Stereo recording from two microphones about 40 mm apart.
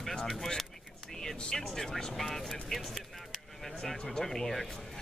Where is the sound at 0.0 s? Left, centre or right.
Centre.